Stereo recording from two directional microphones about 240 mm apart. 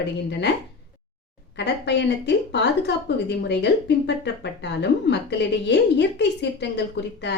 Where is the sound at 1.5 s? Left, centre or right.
Left.